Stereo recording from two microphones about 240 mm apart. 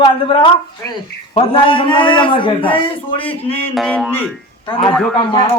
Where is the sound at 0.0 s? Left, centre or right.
Left.